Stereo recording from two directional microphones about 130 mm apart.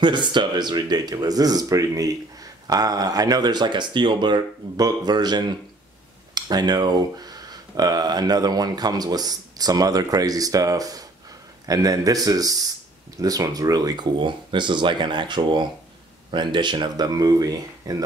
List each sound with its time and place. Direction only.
0.0 s speech: 35° right (ahead or behind)